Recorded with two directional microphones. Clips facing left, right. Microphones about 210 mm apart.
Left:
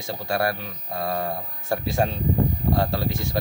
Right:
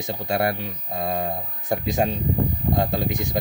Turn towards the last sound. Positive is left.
turn(degrees=-15)  # may be behind; listen again after turning